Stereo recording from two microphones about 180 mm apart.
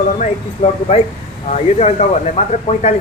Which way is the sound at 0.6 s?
35° left (ahead or behind).